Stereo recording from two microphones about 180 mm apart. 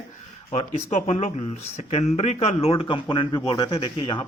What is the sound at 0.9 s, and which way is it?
Speech, 40° left (ahead or behind).